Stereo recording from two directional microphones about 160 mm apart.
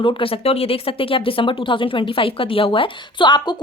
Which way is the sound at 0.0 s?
35° left (ahead or behind).